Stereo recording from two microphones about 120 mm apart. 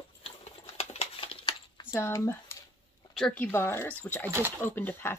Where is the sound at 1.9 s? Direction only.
25° left (ahead or behind).